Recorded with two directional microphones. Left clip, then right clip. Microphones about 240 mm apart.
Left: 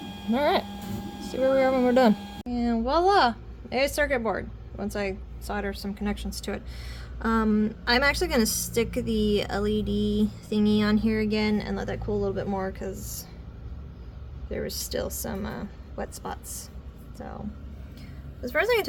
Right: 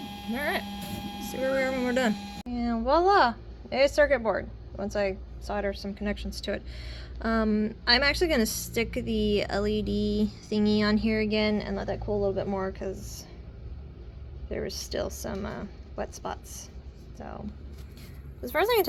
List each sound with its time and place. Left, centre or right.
0.3 s a woman's voice: centre
7.3 s a woman's voice: centre
9.7 s a sound: left
10.5 s a woman's voice: centre
14.5 s a woman's voice: centre
18.4 s a woman's voice: centre